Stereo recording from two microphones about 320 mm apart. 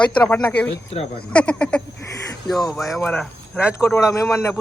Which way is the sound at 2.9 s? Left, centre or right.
Centre.